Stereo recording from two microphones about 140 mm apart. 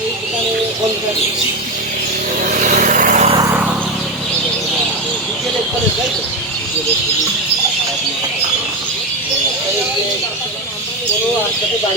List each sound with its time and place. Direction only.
2.6 s vehicle: 65° right (ahead or behind)